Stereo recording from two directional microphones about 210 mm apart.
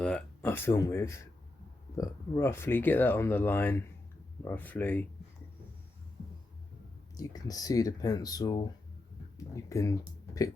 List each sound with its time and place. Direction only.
0.0 s speech: 5° left (ahead or behind)
7.2 s speech: 15° left (ahead or behind)
9.6 s speech: 15° left (ahead or behind)